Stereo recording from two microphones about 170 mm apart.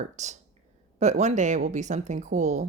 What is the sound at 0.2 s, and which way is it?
Speech, 45° right (ahead or behind).